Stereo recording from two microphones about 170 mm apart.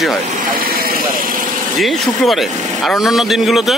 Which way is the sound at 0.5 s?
60° right (ahead or behind).